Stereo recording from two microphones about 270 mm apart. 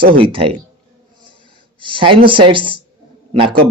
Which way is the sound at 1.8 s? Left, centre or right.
Centre.